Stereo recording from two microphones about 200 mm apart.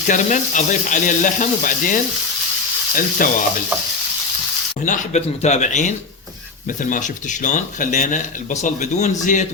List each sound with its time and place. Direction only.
0.1 s speech: 40° left (ahead or behind)
3.2 s stir: 45° left (ahead or behind)
4.9 s speech: 35° left (ahead or behind)
6.9 s speech: 40° left (ahead or behind)